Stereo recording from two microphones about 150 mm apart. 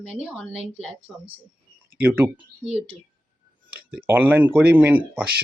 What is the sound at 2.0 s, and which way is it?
Speech, 15° right (ahead or behind).